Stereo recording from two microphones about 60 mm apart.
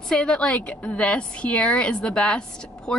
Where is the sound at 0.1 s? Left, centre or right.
Centre.